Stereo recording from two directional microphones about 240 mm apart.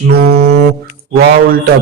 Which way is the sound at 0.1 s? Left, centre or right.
Right.